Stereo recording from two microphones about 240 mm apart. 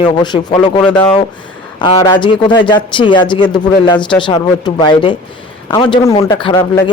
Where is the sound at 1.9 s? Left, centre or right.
Centre.